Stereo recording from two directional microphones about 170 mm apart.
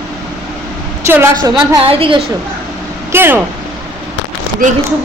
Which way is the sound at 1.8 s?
30° right (ahead or behind).